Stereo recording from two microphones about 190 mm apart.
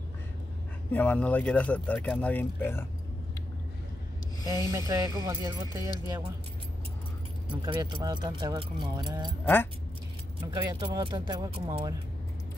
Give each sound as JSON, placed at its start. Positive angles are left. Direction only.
{"t": 0.9, "sound": "speech", "side_deg": 5}
{"t": 4.5, "sound": "speech", "side_deg": -20}
{"t": 7.6, "sound": "speech", "side_deg": -25}
{"t": 10.4, "sound": "speech", "side_deg": -25}